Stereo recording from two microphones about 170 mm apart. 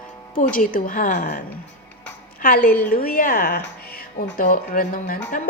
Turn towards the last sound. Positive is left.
turn(degrees=50)  # may be behind; listen again after turning